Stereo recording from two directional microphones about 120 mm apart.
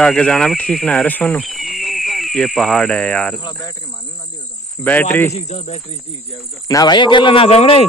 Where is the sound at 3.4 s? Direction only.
35° left (ahead or behind).